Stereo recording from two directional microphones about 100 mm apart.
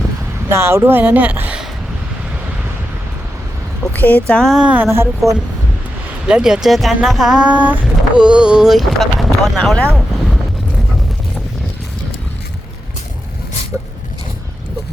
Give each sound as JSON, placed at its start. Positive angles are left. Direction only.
{"t": 0.5, "sound": "speech", "side_deg": -25}
{"t": 3.9, "sound": "speech", "side_deg": 15}
{"t": 4.6, "sound": "speech", "side_deg": -15}
{"t": 4.9, "sound": "speech", "side_deg": -30}
{"t": 6.2, "sound": "speech", "side_deg": -10}